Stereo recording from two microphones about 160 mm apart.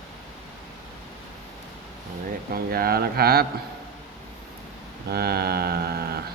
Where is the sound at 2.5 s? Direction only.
70° right (ahead or behind).